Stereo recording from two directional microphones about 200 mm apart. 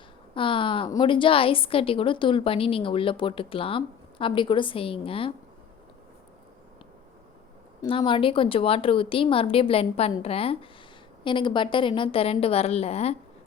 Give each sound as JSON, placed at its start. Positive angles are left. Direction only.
{"t": 0.3, "sound": "a woman's voice", "side_deg": 25}
{"t": 7.8, "sound": "a woman's voice", "side_deg": 25}